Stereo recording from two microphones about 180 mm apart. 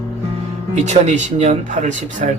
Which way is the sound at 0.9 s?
40° right (ahead or behind).